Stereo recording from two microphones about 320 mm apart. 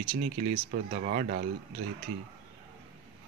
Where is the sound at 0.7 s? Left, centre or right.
Right.